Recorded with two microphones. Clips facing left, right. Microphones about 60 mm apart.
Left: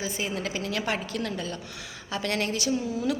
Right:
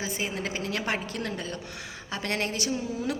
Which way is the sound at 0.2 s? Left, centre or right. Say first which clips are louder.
Left 1 dB; right.